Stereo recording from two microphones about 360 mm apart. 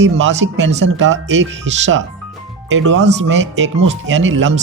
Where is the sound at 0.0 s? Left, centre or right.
Right.